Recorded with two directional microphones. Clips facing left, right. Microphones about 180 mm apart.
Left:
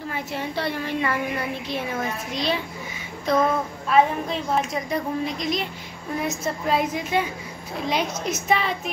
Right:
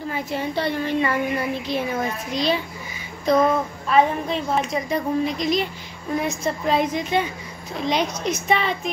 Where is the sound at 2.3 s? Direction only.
Centre (ahead or behind).